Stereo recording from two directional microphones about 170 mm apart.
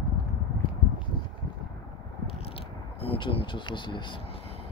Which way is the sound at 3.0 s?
35° left (ahead or behind).